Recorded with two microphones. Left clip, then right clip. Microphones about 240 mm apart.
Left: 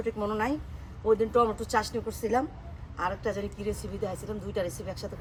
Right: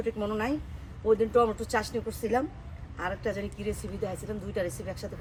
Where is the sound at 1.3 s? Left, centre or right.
Centre.